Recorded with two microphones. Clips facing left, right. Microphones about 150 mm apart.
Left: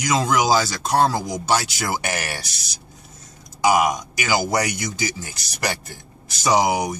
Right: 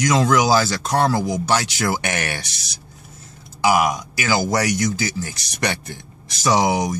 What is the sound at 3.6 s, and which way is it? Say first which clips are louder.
Speech: even; 20° left (ahead or behind).